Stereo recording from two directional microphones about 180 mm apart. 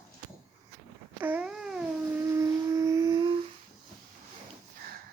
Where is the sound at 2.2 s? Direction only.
15° right (ahead or behind).